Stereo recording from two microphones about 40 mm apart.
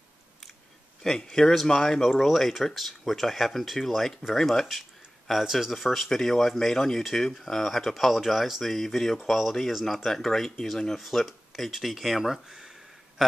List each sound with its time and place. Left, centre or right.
1.0 s speech: centre
2.1 s speech: centre
5.4 s speech: centre
6.0 s speech: centre
7.9 s speech: centre
9.7 s speech: centre
10.0 s speech: centre
11.0 s speech: centre